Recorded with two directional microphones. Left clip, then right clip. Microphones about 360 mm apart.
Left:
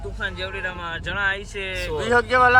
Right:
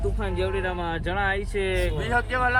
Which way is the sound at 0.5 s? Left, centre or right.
Centre.